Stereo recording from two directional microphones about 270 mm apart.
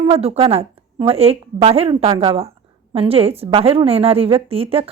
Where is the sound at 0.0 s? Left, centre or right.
Right.